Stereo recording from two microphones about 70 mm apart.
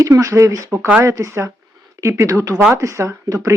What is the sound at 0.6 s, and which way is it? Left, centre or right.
Speech, right.